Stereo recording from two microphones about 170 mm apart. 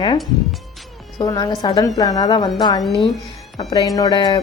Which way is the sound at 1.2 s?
25° left (ahead or behind).